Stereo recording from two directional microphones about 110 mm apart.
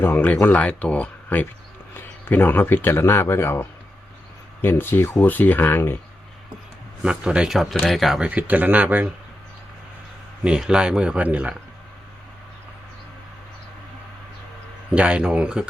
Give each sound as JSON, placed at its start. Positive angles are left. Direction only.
{"t": 0.0, "sound": "speech", "side_deg": 15}
{"t": 7.0, "sound": "speech", "side_deg": -10}
{"t": 10.4, "sound": "speech", "side_deg": -5}
{"t": 14.9, "sound": "speech", "side_deg": -10}